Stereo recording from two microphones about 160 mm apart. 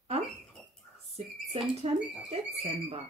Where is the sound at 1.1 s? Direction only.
40° right (ahead or behind).